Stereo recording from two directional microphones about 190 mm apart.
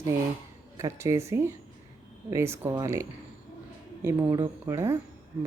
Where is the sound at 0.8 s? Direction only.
15° right (ahead or behind).